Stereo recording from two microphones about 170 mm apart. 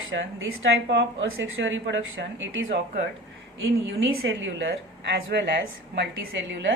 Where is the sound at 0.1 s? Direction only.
90° right.